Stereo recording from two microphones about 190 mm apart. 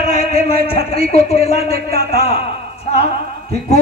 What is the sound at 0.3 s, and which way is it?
Speech, 30° left (ahead or behind).